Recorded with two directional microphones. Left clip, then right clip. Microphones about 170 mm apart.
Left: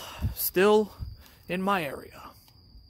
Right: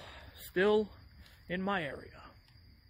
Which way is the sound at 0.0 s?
35° left (ahead or behind).